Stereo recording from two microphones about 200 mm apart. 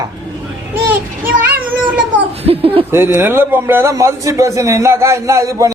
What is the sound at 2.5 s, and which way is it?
Speech, 30° right (ahead or behind).